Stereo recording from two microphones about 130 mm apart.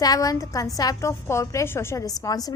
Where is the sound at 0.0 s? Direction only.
30° left (ahead or behind).